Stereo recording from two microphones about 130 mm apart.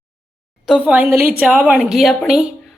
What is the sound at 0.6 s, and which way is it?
A woman's voice, 5° right (ahead or behind).